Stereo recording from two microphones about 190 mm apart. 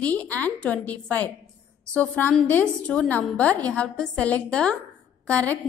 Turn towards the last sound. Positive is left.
turn(degrees=5)  # may be behind; listen again after turning